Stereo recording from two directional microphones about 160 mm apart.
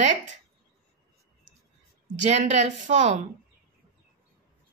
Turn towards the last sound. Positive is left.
turn(degrees=-50)  # may be behind; listen again after turning